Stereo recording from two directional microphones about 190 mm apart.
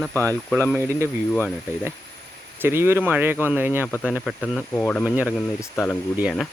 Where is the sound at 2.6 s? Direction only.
15° right (ahead or behind).